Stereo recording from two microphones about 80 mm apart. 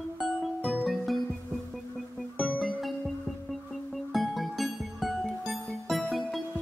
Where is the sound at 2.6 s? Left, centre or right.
Centre.